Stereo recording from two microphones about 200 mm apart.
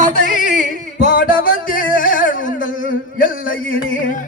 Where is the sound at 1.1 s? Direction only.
45° left (ahead or behind).